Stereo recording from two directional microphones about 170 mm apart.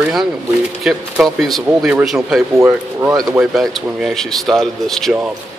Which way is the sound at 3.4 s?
Centre (ahead or behind).